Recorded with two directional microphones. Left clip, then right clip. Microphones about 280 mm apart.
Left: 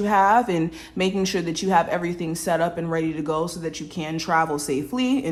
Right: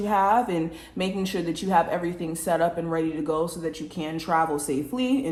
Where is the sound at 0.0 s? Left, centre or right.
Left.